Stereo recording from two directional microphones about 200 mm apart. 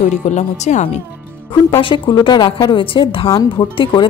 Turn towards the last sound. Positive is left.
turn(degrees=25)  # may be behind; listen again after turning